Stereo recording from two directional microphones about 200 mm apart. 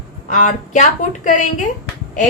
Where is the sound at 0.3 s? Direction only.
40° left (ahead or behind).